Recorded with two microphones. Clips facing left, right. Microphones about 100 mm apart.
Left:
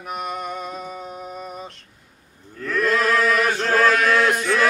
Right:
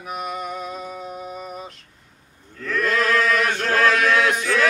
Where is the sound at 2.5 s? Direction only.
5° left (ahead or behind).